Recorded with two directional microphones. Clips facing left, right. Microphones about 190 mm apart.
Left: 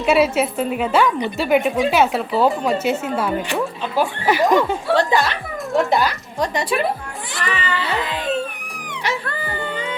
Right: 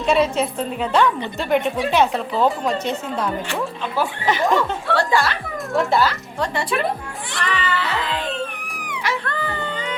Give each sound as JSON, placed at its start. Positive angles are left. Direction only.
{"t": 0.0, "sound": "a woman's voice", "side_deg": 5}
{"t": 3.5, "sound": "speech", "side_deg": 15}
{"t": 9.2, "sound": "a sound", "side_deg": 5}